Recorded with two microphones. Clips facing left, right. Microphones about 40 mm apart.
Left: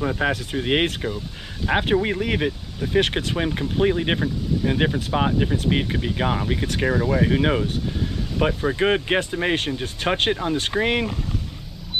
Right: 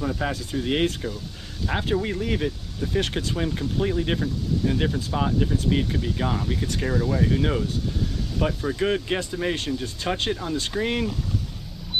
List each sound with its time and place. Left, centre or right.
0.0 s speech: left